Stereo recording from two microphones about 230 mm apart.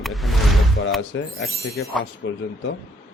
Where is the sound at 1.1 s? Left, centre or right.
Left.